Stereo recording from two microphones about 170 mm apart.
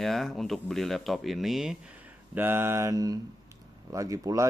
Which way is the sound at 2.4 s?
15° right (ahead or behind).